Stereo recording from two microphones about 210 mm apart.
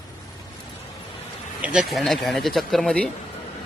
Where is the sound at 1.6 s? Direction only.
5° right (ahead or behind).